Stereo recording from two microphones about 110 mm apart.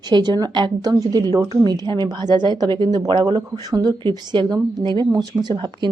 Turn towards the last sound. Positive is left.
turn(degrees=-45)  # may be behind; listen again after turning